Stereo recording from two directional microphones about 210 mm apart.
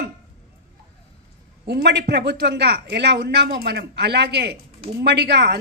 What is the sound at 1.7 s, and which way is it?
A woman's voice, 50° right (ahead or behind).